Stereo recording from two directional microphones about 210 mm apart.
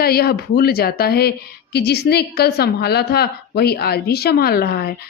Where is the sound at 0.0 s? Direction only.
45° left (ahead or behind).